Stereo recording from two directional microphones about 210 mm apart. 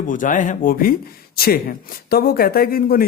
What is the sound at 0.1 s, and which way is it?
Speech, 40° left (ahead or behind).